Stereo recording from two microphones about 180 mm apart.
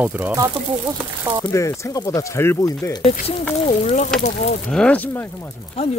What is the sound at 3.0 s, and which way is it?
Speech, 35° left (ahead or behind).